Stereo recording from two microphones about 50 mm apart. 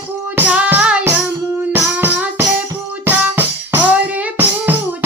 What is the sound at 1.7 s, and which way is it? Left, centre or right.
Music, right.